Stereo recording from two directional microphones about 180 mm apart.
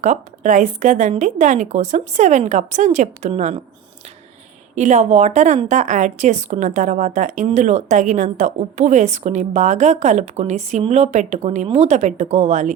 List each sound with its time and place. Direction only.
0.0 s a woman's voice: 45° right (ahead or behind)
4.7 s a woman's voice: 40° right (ahead or behind)